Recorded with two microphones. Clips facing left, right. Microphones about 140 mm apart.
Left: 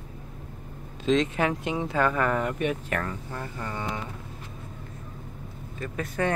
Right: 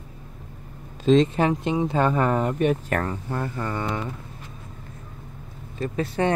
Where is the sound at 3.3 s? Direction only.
55° right (ahead or behind).